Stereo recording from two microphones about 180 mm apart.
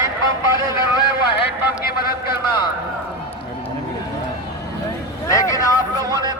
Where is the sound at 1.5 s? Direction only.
60° left (ahead or behind).